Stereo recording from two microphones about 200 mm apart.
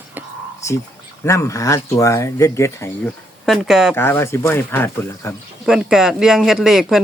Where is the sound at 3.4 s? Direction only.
Centre (ahead or behind).